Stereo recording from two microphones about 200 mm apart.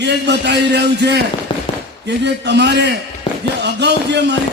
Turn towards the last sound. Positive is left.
turn(degrees=-60)  # may be behind; listen again after turning